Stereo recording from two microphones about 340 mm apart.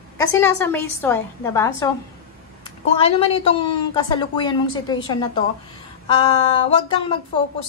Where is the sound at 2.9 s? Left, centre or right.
Centre.